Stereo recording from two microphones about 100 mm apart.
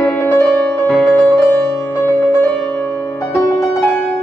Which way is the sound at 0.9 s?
15° left (ahead or behind).